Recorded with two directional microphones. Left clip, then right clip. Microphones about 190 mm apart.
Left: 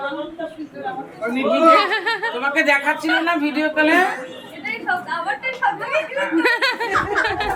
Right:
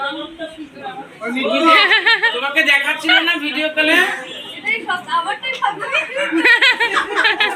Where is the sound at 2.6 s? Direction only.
65° left (ahead or behind).